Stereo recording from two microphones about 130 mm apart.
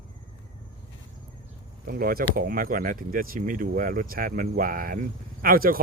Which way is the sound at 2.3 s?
90° right.